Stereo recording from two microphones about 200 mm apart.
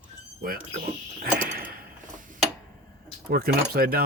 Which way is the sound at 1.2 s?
45° right (ahead or behind).